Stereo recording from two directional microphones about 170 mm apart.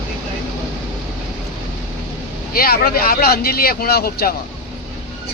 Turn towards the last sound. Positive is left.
turn(degrees=65)  # may be behind; listen again after turning